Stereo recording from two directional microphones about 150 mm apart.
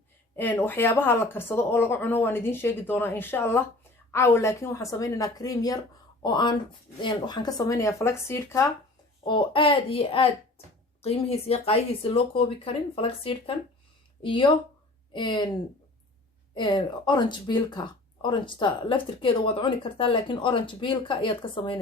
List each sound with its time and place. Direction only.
0.3 s speech: 15° left (ahead or behind)
9.2 s speech: 35° left (ahead or behind)
16.6 s speech: 30° left (ahead or behind)